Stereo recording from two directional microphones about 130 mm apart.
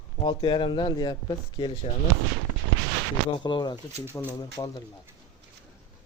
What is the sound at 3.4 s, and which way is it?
Speech, 35° left (ahead or behind).